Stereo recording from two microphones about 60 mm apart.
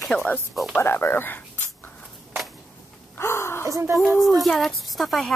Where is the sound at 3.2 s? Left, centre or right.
Left.